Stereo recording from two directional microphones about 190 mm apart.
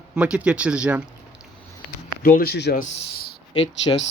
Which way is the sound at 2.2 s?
50° left (ahead or behind).